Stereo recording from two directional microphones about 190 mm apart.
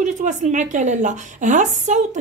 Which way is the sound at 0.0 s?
40° right (ahead or behind).